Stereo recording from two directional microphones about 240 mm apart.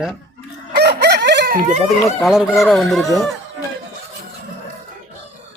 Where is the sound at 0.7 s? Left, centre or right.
Right.